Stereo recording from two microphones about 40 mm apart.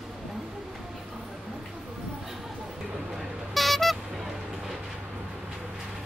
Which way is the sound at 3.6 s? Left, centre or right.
Centre.